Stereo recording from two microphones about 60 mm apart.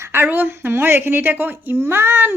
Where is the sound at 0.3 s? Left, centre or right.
Right.